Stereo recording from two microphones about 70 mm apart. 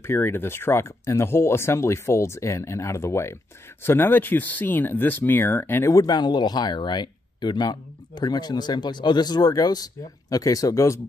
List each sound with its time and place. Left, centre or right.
0.0 s speech: left
5.9 s speech: left